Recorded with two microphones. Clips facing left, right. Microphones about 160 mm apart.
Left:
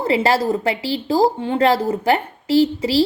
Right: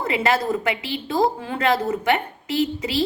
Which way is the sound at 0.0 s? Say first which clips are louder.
Left 4 dB; 30° left (ahead or behind).